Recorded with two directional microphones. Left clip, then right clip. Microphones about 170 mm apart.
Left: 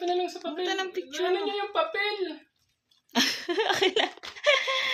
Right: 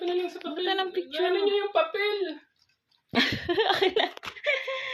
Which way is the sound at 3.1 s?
Centre (ahead or behind).